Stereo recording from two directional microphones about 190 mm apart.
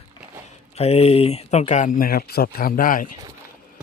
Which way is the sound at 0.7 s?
30° left (ahead or behind).